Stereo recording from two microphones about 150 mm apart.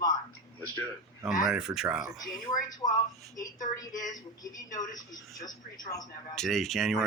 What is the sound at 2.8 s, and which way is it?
Speech, 40° left (ahead or behind).